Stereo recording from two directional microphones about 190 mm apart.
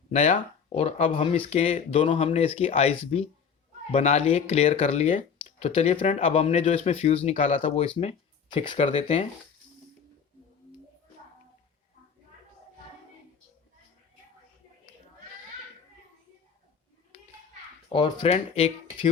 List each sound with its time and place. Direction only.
0.1 s speech: 35° left (ahead or behind)
17.8 s speech: 25° left (ahead or behind)